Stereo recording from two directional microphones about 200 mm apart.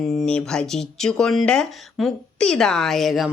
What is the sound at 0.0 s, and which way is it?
Speech, 5° left (ahead or behind).